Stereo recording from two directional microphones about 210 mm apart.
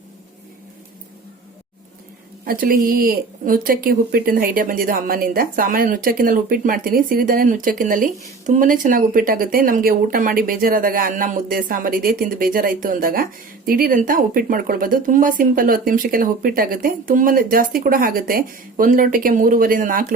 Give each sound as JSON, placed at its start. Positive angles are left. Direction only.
{"t": 2.4, "sound": "speech", "side_deg": -40}